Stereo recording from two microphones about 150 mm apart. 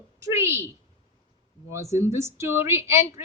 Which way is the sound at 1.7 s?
20° right (ahead or behind).